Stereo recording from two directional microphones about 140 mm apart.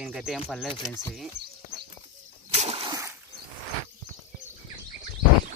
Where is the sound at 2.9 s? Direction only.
20° right (ahead or behind).